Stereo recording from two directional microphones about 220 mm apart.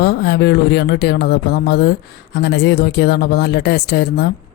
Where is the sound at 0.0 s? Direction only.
45° left (ahead or behind).